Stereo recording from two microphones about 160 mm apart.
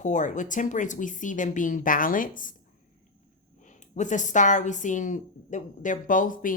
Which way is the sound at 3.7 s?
50° left (ahead or behind).